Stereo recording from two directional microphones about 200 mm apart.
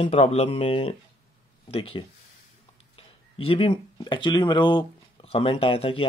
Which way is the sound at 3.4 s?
30° left (ahead or behind).